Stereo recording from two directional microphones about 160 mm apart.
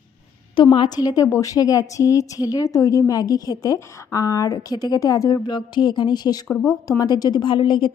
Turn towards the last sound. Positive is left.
turn(degrees=30)  # may be behind; listen again after turning